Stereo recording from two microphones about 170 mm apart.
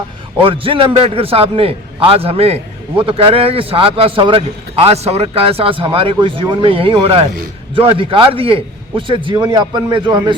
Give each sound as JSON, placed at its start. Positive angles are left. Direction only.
{"t": 0.4, "sound": "a man's voice", "side_deg": -30}